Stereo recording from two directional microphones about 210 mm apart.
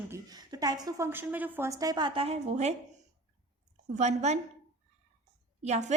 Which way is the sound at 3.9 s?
35° right (ahead or behind).